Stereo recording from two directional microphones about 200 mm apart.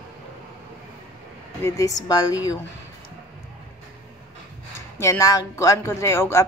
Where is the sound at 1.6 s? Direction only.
15° left (ahead or behind).